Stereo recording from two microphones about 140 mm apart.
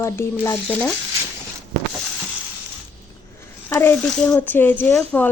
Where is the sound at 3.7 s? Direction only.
15° left (ahead or behind).